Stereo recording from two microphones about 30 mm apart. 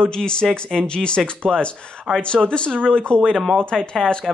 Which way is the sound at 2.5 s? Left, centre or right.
Left.